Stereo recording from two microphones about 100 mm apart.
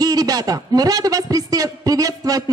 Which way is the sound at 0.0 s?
40° right (ahead or behind).